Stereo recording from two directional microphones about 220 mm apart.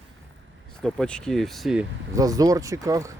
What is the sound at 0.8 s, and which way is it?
Speech, 5° left (ahead or behind).